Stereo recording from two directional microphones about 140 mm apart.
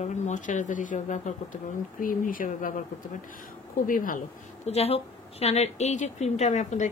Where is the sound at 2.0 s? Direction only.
75° left (ahead or behind).